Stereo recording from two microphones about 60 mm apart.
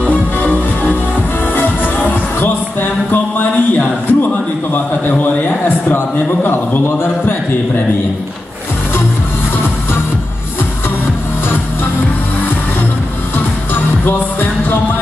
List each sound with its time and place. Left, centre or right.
0.0 s music: left
5.9 s a man's voice: left